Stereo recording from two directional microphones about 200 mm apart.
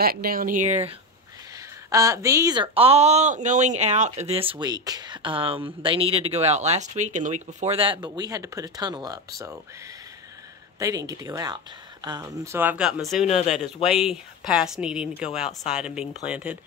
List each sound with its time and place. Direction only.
0.0 s speech: 50° right (ahead or behind)
1.9 s speech: 15° right (ahead or behind)
10.8 s speech: 15° right (ahead or behind); by 13.3 s centre (ahead or behind)
13.3 s speech: 35° left (ahead or behind)
13.8 s speech: centre (ahead or behind)